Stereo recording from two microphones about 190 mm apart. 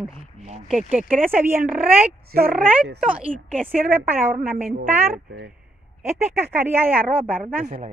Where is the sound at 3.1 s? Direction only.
10° right (ahead or behind).